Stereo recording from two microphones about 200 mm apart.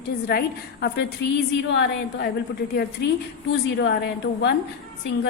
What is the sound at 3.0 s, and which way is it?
Speech, 55° left (ahead or behind).